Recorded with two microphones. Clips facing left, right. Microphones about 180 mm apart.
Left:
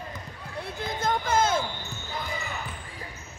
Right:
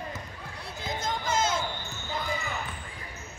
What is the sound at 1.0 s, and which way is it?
Music, 55° left (ahead or behind).